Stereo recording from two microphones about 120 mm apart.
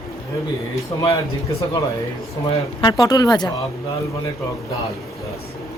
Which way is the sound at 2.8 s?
35° left (ahead or behind).